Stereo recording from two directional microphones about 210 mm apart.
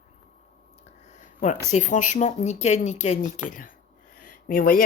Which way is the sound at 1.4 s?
35° left (ahead or behind).